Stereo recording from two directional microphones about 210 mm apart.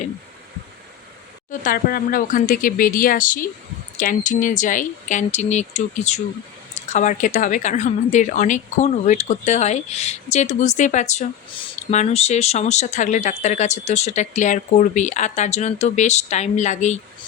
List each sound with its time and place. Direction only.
1.5 s speech: 40° left (ahead or behind)